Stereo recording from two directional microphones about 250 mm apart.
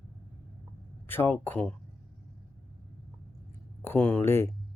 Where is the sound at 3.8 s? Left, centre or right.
Centre.